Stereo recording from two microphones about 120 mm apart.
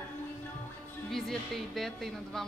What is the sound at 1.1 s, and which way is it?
A woman's voice, centre (ahead or behind).